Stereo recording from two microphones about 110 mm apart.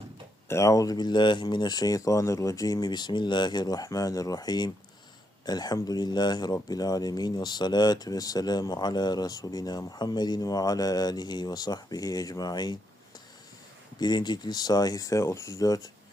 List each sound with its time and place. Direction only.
0.4 s speech: 25° left (ahead or behind)
14.0 s speech: 40° left (ahead or behind)